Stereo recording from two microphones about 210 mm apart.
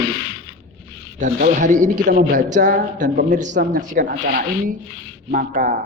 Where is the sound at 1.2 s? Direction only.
35° right (ahead or behind).